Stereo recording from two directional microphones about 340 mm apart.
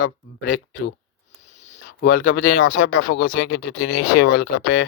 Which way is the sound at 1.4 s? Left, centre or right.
Centre.